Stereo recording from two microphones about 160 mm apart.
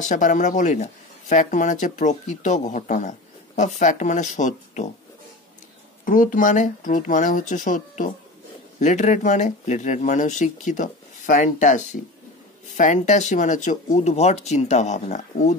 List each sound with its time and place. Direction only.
0.0 s speech: 50° left (ahead or behind)
6.0 s speech: 55° left (ahead or behind)